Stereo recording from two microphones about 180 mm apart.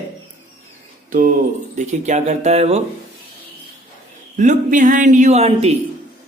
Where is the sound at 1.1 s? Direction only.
50° right (ahead or behind).